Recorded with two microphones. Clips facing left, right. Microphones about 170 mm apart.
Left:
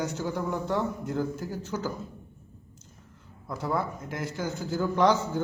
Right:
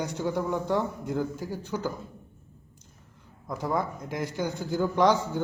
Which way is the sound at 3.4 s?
15° right (ahead or behind).